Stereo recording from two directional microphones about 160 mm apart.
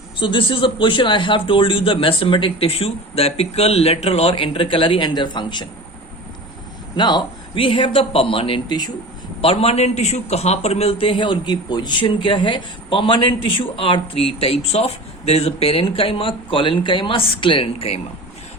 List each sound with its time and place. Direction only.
0.2 s a man's voice: 30° left (ahead or behind)
6.9 s a man's voice: 30° left (ahead or behind)